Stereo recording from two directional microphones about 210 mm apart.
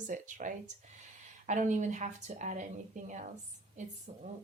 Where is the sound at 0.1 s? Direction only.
40° right (ahead or behind).